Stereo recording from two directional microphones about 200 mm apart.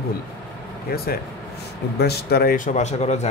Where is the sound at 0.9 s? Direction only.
50° left (ahead or behind).